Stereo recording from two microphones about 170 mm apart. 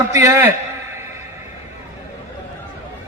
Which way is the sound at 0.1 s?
15° right (ahead or behind).